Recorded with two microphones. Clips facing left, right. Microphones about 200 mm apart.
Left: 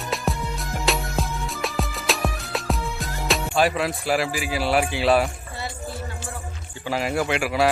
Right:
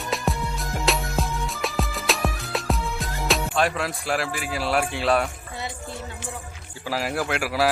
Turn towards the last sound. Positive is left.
turn(degrees=0)  # may be behind; listen again after turning